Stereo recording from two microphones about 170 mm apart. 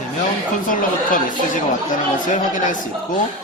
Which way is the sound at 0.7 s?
50° left (ahead or behind).